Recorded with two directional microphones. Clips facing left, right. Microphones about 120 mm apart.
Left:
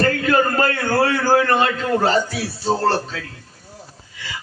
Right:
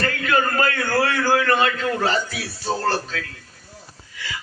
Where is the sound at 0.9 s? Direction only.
35° left (ahead or behind).